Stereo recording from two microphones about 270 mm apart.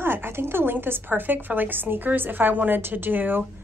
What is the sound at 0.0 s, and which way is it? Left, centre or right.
A woman's voice, centre.